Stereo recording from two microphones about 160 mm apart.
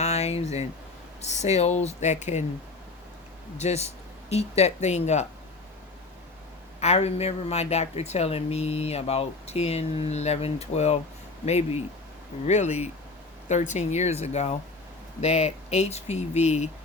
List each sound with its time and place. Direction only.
0.0 s a sound: 40° left (ahead or behind)
1.2 s speech: 45° left (ahead or behind)
3.6 s speech: 40° left (ahead or behind)
6.7 s a woman's voice: 40° left (ahead or behind)